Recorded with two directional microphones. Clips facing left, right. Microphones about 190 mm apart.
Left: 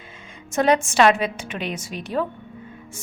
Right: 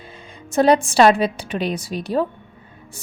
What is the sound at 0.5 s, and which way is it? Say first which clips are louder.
A woman's voice: right 4 dB; 35° right (ahead or behind).